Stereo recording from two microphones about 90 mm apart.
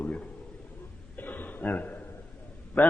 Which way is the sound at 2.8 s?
15° left (ahead or behind).